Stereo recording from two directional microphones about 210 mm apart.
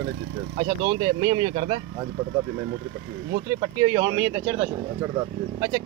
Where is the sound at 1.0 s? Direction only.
20° right (ahead or behind).